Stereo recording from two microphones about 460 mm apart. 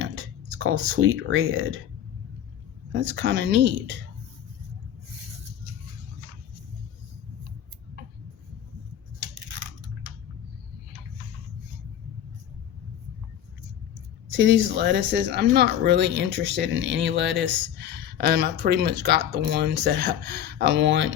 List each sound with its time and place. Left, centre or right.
0.0 s speech: right
2.9 s speech: right
14.3 s speech: right